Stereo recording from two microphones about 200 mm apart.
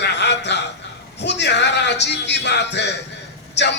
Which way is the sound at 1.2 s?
60° left (ahead or behind).